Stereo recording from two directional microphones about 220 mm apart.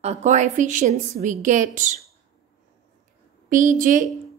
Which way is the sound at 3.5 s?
35° right (ahead or behind).